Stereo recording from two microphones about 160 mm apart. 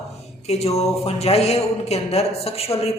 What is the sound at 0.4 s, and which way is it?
A man's voice, 40° left (ahead or behind).